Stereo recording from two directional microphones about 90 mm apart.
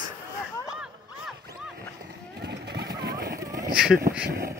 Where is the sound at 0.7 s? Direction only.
5° right (ahead or behind).